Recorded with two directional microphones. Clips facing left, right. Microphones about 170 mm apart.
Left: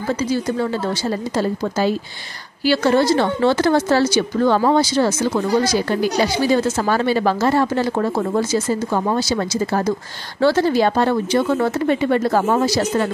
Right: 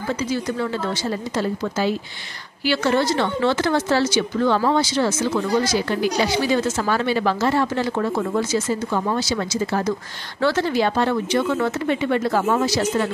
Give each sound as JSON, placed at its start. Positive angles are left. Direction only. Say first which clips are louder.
{"t": 0.3, "sound": "a woman's voice", "louder": "left 3 dB", "side_deg": 35}